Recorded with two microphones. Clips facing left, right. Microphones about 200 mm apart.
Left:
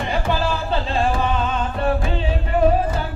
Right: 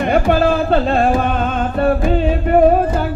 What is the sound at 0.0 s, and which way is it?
Music, 55° right (ahead or behind).